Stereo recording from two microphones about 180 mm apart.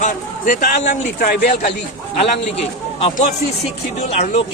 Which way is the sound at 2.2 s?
35° left (ahead or behind).